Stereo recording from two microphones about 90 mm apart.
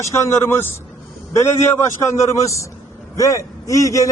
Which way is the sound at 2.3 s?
35° left (ahead or behind).